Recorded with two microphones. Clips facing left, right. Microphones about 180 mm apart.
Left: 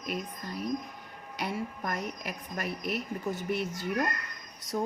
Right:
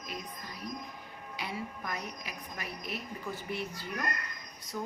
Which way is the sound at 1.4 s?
50° left (ahead or behind).